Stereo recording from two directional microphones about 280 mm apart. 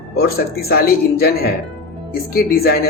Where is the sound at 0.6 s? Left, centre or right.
Left.